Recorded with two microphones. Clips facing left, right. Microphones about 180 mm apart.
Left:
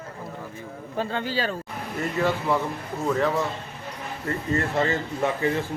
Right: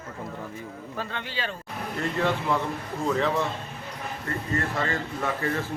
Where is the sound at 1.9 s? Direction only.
5° left (ahead or behind).